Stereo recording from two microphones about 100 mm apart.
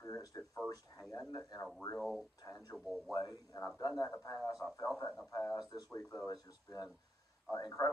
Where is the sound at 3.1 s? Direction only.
35° left (ahead or behind).